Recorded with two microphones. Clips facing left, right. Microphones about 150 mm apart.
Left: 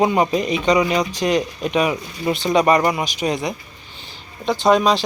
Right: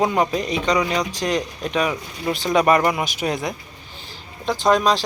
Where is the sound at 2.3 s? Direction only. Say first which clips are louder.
Left 1 dB; centre (ahead or behind).